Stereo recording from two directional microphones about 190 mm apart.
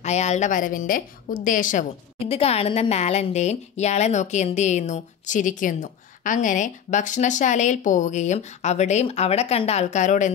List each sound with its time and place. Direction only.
0.0 s a woman's voice: 35° left (ahead or behind)
2.1 s a woman's voice: 30° left (ahead or behind)